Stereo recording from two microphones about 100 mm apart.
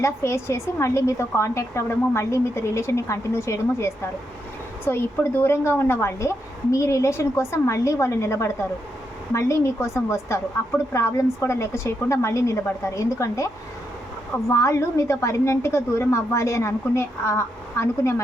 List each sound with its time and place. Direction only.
0.0 s a woman's voice: 30° left (ahead or behind)